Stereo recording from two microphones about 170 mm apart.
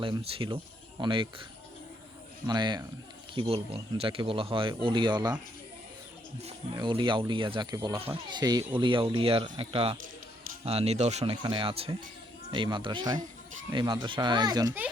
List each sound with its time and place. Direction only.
0.0 s speech: 30° right (ahead or behind)
2.5 s speech: 25° right (ahead or behind)
6.7 s speech: 25° right (ahead or behind)